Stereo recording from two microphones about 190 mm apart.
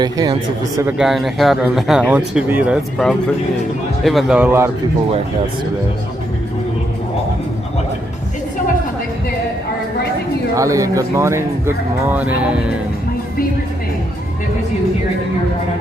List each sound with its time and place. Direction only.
0.0 s speech: 20° right (ahead or behind)
0.8 s speech: 5° right (ahead or behind)
10.5 s speech: 15° right (ahead or behind)